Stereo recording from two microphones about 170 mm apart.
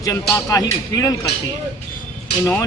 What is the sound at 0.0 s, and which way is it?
Speech, 20° left (ahead or behind).